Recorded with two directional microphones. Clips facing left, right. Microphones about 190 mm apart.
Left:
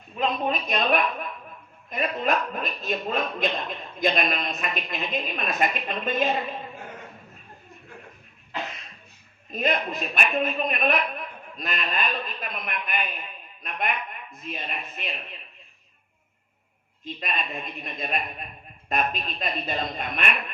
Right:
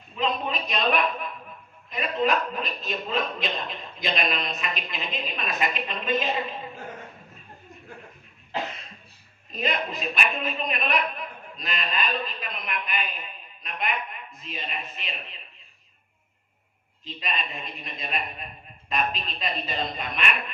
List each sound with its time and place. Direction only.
0.2 s a woman's voice: 50° left (ahead or behind)
9.5 s a woman's voice: 50° left (ahead or behind)
17.0 s a woman's voice: 50° left (ahead or behind)